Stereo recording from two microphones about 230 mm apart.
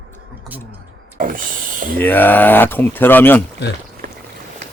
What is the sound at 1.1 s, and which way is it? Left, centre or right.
Speech, right.